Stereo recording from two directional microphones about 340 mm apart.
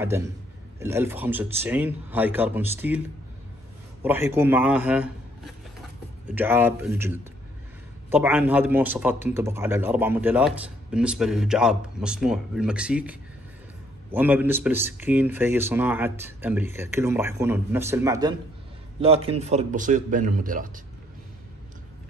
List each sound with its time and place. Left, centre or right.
0.7 s a man's voice: centre
4.0 s a man's voice: centre; by 20.8 s right